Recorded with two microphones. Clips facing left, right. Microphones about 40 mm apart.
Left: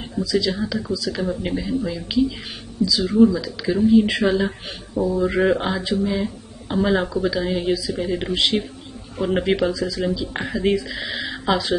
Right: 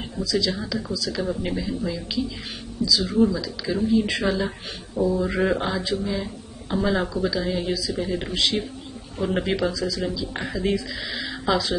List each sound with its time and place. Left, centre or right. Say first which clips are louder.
0.1 s speech: left 3 dB; centre